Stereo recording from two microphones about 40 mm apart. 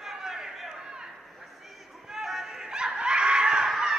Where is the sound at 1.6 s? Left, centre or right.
Centre.